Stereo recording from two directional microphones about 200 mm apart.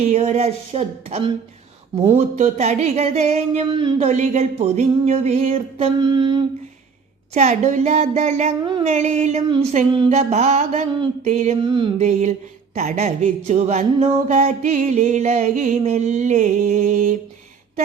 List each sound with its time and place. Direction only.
0.0 s speech: 30° right (ahead or behind)
2.3 s speech: 35° right (ahead or behind)
7.3 s speech: 35° right (ahead or behind)
9.5 s a sound: 25° right (ahead or behind)
10.1 s speech: 35° right (ahead or behind)
11.6 s a sound: 25° right (ahead or behind)
11.9 s speech: 35° right (ahead or behind)